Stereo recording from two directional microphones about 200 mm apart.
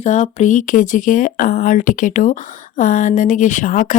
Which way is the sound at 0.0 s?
35° left (ahead or behind).